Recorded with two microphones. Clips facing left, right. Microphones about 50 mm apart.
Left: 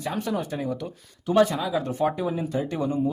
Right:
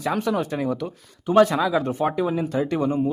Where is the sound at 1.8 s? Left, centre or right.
Right.